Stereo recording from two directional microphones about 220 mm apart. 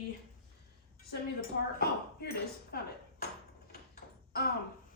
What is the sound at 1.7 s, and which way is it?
Speech, 45° left (ahead or behind).